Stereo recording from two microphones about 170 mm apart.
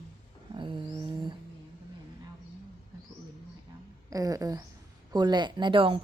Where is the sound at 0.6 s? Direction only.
30° right (ahead or behind).